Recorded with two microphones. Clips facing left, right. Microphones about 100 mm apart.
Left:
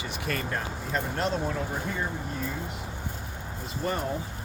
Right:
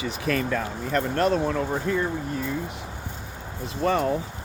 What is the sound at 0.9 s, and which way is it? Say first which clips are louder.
Speech: right 7 dB; 75° right (ahead or behind).